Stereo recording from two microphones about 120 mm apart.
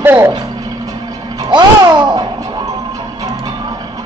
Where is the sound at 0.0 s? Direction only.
15° right (ahead or behind).